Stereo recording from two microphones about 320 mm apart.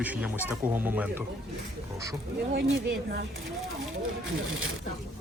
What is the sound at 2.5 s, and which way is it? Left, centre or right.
Speech, right.